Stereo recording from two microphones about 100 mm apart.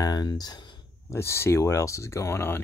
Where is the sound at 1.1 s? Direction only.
25° left (ahead or behind).